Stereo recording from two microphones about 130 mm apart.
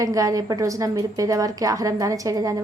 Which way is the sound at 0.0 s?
25° right (ahead or behind).